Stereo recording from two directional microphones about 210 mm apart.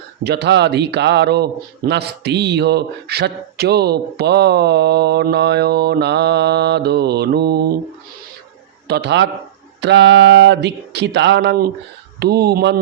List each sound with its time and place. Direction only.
0.3 s a man's voice: 55° right (ahead or behind)
8.9 s a man's voice: 55° right (ahead or behind)